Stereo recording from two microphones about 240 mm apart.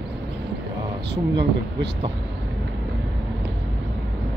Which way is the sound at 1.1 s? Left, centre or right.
Right.